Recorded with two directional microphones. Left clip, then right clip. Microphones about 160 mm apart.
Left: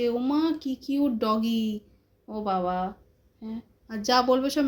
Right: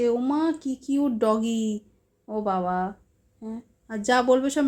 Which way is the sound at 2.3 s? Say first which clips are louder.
Right 2 dB; 35° right (ahead or behind).